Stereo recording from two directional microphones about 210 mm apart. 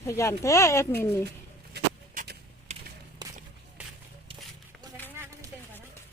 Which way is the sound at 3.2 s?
20° right (ahead or behind).